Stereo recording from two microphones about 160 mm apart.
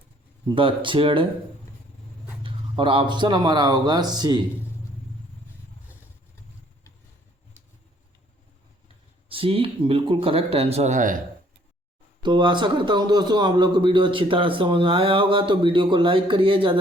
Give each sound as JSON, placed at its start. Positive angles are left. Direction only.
{"t": 0.4, "sound": "a man's voice", "side_deg": -30}
{"t": 2.4, "sound": "a man's voice", "side_deg": -35}
{"t": 9.3, "sound": "a man's voice", "side_deg": -35}
{"t": 12.2, "sound": "a man's voice", "side_deg": -30}